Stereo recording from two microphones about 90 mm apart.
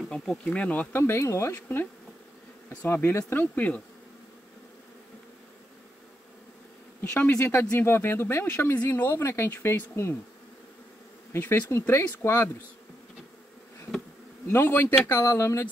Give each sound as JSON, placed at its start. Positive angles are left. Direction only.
{"t": 0.1, "sound": "bee", "side_deg": 5}
{"t": 0.5, "sound": "speech", "side_deg": 15}
{"t": 1.0, "sound": "speech", "side_deg": 30}
{"t": 7.0, "sound": "speech", "side_deg": 20}
{"t": 11.3, "sound": "speech", "side_deg": 25}
{"t": 14.5, "sound": "speech", "side_deg": 25}
{"t": 15.1, "sound": "speech", "side_deg": 35}